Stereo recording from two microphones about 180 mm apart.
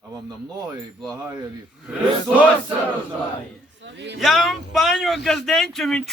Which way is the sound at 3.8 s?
75° right (ahead or behind).